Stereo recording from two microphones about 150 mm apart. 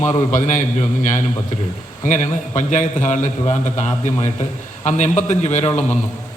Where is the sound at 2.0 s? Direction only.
55° left (ahead or behind).